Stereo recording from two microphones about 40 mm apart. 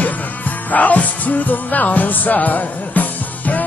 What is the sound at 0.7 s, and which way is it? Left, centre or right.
Music, left.